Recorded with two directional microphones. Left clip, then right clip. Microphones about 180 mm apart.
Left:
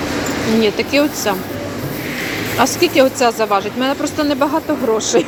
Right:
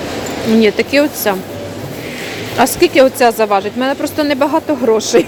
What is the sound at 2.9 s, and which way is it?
Speech, 35° right (ahead or behind).